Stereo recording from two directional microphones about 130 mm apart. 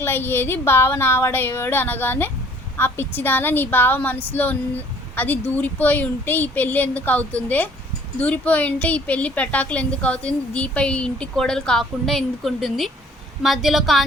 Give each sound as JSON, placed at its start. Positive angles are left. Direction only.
{"t": 0.0, "sound": "a woman's voice", "side_deg": 15}